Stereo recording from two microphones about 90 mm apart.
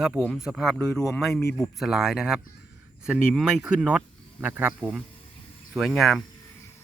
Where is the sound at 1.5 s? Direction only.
5° right (ahead or behind).